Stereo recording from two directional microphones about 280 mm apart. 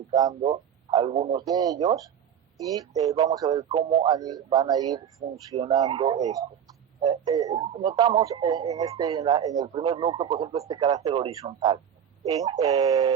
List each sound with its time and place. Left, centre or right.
0.1 s a man's voice: centre